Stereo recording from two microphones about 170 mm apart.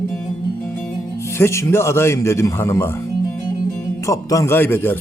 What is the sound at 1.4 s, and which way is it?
Speech, 15° left (ahead or behind).